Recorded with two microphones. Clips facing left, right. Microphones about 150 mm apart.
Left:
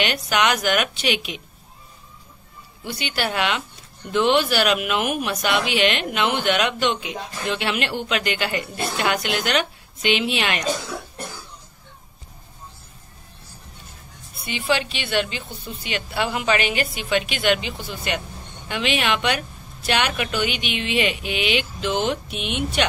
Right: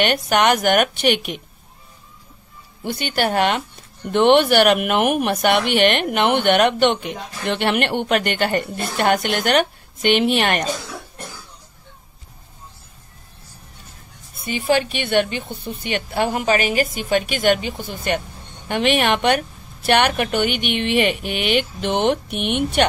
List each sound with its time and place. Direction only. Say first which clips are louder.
0.0 s a woman's voice: right 4 dB; 50° right (ahead or behind)
2.8 s a woman's voice: right 5 dB; 50° right (ahead or behind)
4.1 s speech: right 5 dB; 60° right (ahead or behind)
14.4 s a woman's voice: right 4 dB; 45° right (ahead or behind)